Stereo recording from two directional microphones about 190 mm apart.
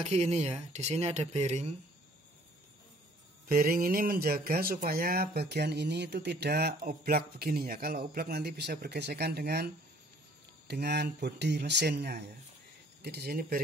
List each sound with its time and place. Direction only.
0.0 s speech: 35° right (ahead or behind)
3.4 s speech: 50° right (ahead or behind)
10.7 s speech: 60° right (ahead or behind)